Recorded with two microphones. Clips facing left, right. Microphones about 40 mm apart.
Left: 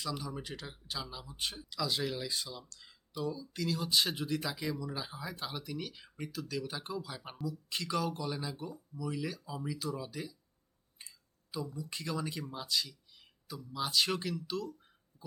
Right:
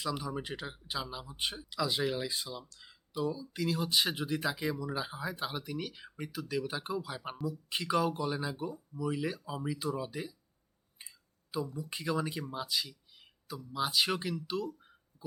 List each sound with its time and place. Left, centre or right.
0.0 s speech: centre
6.1 s speech: right
10.9 s a sound: centre
13.7 s speech: centre